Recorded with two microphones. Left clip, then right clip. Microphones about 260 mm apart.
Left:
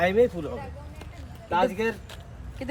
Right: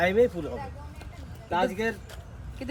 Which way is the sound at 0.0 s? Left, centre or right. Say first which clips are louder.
Left 1 dB; centre.